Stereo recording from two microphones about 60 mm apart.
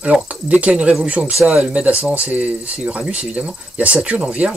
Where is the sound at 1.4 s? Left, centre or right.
Centre.